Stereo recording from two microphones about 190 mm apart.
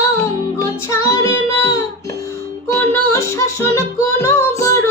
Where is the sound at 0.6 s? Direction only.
15° left (ahead or behind).